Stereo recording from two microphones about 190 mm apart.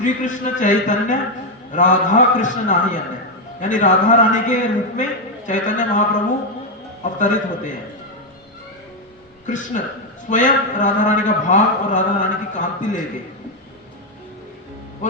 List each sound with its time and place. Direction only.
0.0 s a man's voice: 40° left (ahead or behind)
10.2 s a man's voice: 40° left (ahead or behind)